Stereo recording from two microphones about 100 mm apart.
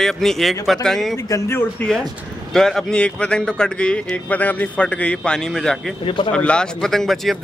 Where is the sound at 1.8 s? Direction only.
5° left (ahead or behind).